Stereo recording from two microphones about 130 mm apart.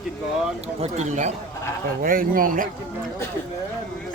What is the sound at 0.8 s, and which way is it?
Speech, 65° right (ahead or behind).